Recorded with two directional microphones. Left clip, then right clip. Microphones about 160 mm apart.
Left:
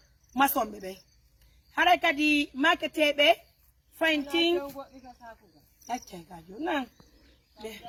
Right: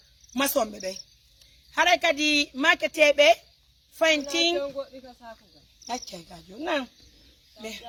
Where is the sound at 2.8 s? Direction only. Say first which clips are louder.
Right 5 dB; 30° right (ahead or behind).